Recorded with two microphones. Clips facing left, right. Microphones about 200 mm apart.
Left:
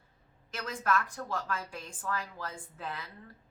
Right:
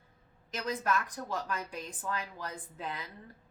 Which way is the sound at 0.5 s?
20° right (ahead or behind).